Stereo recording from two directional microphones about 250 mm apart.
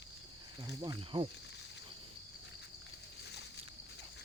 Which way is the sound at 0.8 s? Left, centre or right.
Centre.